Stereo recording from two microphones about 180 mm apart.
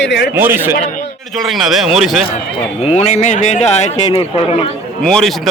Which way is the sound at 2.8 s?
40° left (ahead or behind).